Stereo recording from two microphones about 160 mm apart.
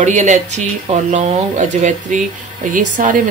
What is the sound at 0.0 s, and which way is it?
Speech, 50° right (ahead or behind).